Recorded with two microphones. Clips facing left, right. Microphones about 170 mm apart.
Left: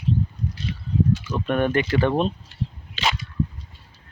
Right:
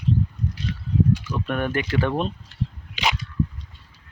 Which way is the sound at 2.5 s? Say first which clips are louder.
Right 1 dB; 10° left (ahead or behind).